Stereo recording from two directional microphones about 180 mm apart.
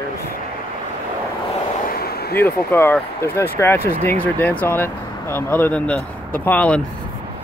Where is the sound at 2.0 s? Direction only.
60° left (ahead or behind).